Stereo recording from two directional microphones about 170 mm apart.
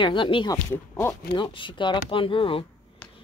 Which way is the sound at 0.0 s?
30° left (ahead or behind).